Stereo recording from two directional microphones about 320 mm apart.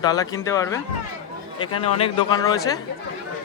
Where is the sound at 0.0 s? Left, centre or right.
Centre.